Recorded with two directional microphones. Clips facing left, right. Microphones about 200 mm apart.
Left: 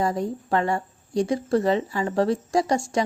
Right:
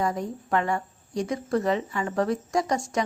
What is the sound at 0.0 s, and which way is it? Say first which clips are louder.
Speech: left 3 dB; 30° left (ahead or behind).